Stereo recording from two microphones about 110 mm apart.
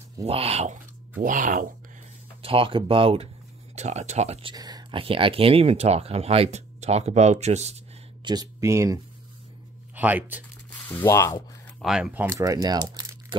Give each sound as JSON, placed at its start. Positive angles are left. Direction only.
{"t": 0.2, "sound": "speech", "side_deg": -65}
{"t": 2.4, "sound": "speech", "side_deg": -55}
{"t": 3.7, "sound": "speech", "side_deg": -90}
{"t": 4.6, "sound": "speech", "side_deg": -35}
{"t": 4.9, "sound": "speech", "side_deg": -55}
{"t": 8.2, "sound": "speech", "side_deg": -40}
{"t": 8.5, "sound": "speech", "side_deg": -30}
{"t": 9.9, "sound": "speech", "side_deg": -15}
{"t": 10.7, "sound": "speech", "side_deg": 20}
{"t": 11.8, "sound": "speech", "side_deg": -5}
{"t": 12.3, "sound": "speech", "side_deg": -30}